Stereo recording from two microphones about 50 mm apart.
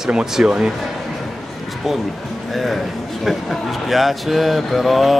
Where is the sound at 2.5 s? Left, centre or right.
Centre.